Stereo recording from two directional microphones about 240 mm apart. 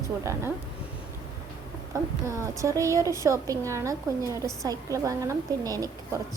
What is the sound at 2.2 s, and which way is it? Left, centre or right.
A woman's voice, centre.